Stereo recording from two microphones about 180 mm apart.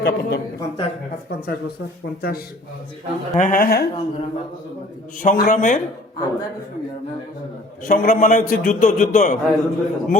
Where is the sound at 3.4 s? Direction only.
50° left (ahead or behind).